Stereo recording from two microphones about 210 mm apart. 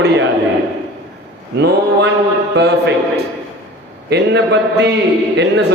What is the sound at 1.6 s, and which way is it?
A man's voice, 50° right (ahead or behind).